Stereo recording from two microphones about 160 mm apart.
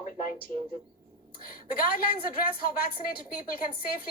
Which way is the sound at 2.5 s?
70° left (ahead or behind).